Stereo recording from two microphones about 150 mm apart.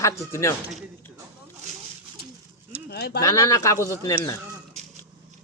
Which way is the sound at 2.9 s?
90° left.